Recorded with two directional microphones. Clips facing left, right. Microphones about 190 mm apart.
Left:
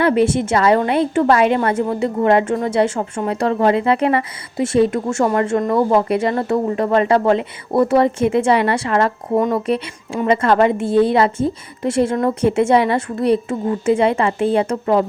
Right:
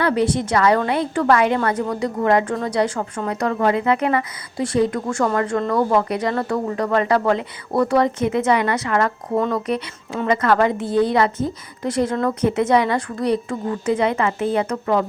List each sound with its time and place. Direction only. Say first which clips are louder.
0.0 s speech: left 4 dB; 20° left (ahead or behind)